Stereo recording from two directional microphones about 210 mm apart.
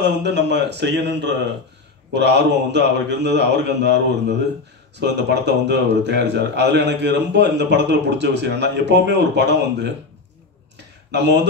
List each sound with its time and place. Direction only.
0.0 s a man's voice: 55° right (ahead or behind)
11.1 s speech: 55° right (ahead or behind)